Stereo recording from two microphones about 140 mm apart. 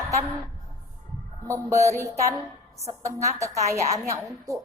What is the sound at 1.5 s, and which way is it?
A woman's voice, 20° right (ahead or behind).